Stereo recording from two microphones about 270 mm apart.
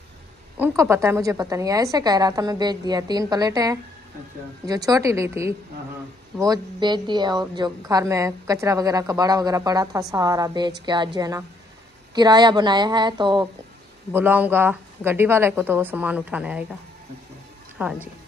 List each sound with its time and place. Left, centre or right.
0.6 s a woman's voice: centre
14.1 s a woman's voice: centre
17.8 s speech: centre